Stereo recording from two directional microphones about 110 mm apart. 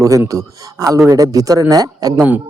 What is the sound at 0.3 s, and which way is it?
Speech, 30° right (ahead or behind).